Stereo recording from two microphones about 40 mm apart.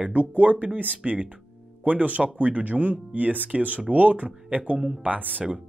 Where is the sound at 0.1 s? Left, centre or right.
Right.